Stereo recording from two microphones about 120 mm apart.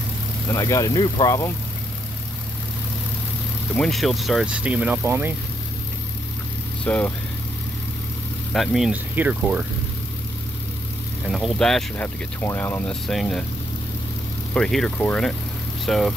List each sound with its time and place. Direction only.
0.5 s speech: 25° left (ahead or behind)
3.7 s speech: 5° left (ahead or behind); by 5.3 s 20° right (ahead or behind)
6.8 s speech: 10° left (ahead or behind)
8.5 s speech: 5° right (ahead or behind)
8.9 s speech: 15° right (ahead or behind)
11.2 s speech: centre (ahead or behind)
12.4 s speech: 20° left (ahead or behind)
13.0 s speech: centre (ahead or behind)
14.5 s speech: 5° left (ahead or behind)